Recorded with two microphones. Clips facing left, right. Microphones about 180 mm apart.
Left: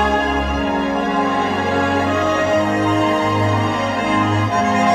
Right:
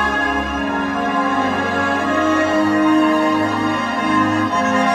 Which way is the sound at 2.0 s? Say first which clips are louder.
Right 1 dB; 55° right (ahead or behind).